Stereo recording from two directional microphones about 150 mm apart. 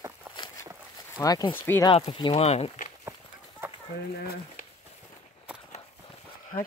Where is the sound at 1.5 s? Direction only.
15° left (ahead or behind).